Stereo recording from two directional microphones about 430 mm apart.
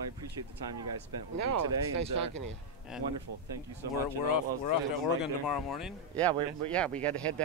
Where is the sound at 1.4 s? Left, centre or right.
Right.